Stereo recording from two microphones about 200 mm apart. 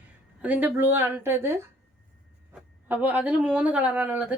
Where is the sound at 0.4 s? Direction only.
10° right (ahead or behind).